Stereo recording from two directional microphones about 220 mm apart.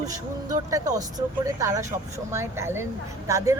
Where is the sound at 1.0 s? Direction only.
15° right (ahead or behind).